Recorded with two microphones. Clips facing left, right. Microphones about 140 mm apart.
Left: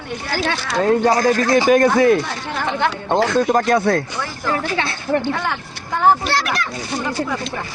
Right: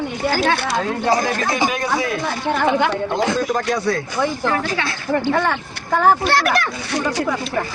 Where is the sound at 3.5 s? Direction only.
55° left (ahead or behind).